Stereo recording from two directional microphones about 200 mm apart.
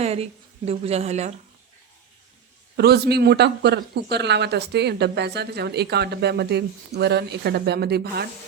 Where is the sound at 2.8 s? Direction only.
55° right (ahead or behind).